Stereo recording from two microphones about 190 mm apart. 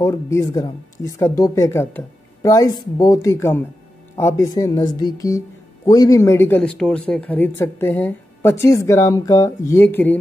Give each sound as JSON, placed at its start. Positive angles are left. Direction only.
{"t": 0.0, "sound": "speech", "side_deg": 15}